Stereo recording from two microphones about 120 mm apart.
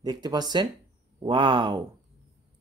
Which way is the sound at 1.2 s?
45° right (ahead or behind).